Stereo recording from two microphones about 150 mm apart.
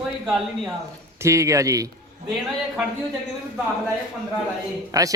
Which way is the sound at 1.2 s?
20° right (ahead or behind).